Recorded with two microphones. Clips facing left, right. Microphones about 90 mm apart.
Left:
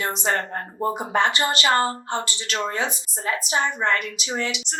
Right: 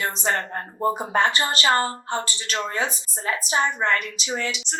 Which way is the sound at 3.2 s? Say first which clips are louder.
Even; 30° right (ahead or behind).